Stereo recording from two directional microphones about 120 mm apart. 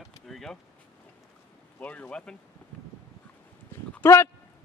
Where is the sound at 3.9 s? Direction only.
20° left (ahead or behind).